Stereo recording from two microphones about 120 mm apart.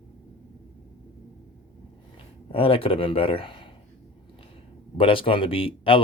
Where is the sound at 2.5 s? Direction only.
50° left (ahead or behind).